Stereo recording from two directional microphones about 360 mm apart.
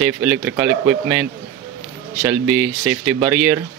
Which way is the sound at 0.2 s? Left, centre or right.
Centre.